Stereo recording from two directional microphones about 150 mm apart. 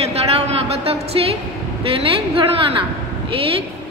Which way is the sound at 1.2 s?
35° right (ahead or behind).